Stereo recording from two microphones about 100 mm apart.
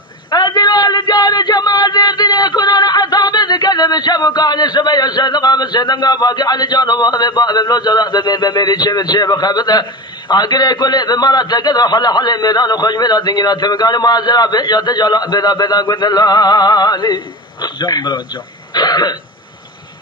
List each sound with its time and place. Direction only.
0.3 s a sound: 45° left (ahead or behind)
10.2 s a man's voice: 45° left (ahead or behind)
18.7 s throat clearing: 45° left (ahead or behind)